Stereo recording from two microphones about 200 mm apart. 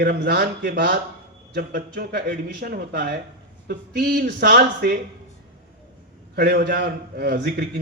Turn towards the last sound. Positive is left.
turn(degrees=-50)  # may be behind; listen again after turning